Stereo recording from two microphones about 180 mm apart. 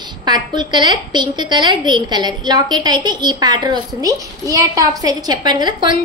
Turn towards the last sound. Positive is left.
turn(degrees=-25)  # may be behind; listen again after turning